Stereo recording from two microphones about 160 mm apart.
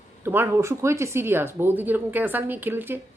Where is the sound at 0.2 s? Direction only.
15° right (ahead or behind).